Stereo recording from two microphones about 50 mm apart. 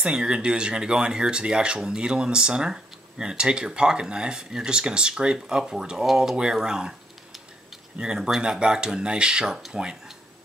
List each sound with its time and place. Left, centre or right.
0.0 s speech: centre